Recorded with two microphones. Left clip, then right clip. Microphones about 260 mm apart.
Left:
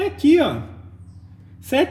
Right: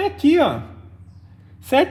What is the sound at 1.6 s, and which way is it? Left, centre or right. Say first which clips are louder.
Speech: right 2 dB; right.